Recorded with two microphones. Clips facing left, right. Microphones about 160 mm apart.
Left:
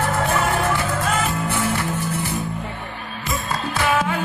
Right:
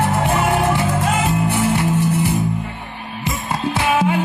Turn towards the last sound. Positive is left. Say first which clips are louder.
# right 3 dB
turn(degrees=-20)  # may be behind; listen again after turning